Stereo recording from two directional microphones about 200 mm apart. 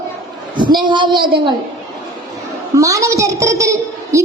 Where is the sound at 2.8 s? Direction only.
15° right (ahead or behind).